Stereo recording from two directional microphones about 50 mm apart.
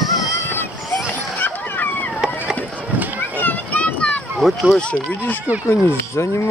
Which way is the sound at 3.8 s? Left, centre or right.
Left.